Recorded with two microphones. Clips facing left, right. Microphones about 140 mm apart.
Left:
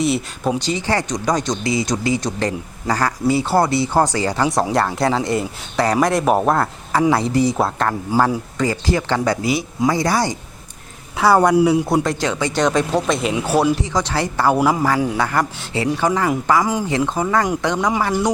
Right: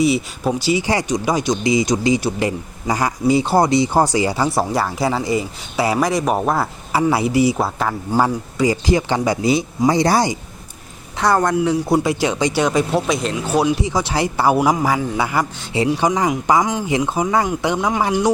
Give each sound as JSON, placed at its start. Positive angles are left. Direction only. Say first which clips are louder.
{"t": 0.0, "sound": "speech", "louder": "right 2 dB", "side_deg": 0}
{"t": 8.5, "sound": "speech", "louder": "right 7 dB", "side_deg": -15}
{"t": 11.2, "sound": "a man's voice", "louder": "left 3 dB", "side_deg": 10}
{"t": 12.0, "sound": "speech", "louder": "right 2 dB", "side_deg": -15}
{"t": 12.6, "sound": "speech", "louder": "left 4 dB", "side_deg": -5}
{"t": 13.7, "sound": "speech", "louder": "right 1 dB", "side_deg": -10}